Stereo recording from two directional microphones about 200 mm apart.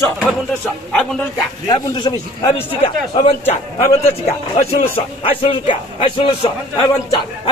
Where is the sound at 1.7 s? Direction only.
20° left (ahead or behind).